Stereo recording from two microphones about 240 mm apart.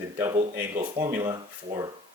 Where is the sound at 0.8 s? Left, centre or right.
Centre.